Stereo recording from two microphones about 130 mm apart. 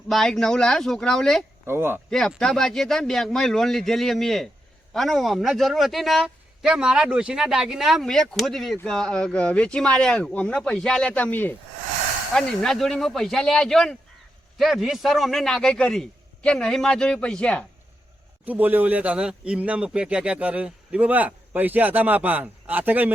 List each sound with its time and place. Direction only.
0.1 s a man's voice: 5° left (ahead or behind)
1.6 s speech: 20° right (ahead or behind)
2.0 s a man's voice: 5° left (ahead or behind)
18.4 s speech: 15° right (ahead or behind)